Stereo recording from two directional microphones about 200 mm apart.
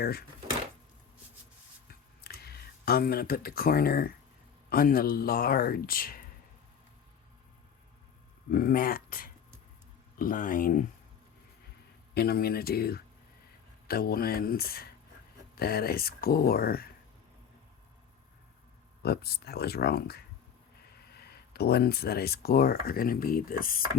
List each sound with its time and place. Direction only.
0.0 s speech: 50° left (ahead or behind)
1.9 s a sound: 50° left (ahead or behind)
4.7 s speech: 45° left (ahead or behind)
8.4 s speech: 45° left (ahead or behind)
12.1 s speech: 50° left (ahead or behind)
19.0 s speech: 50° left (ahead or behind)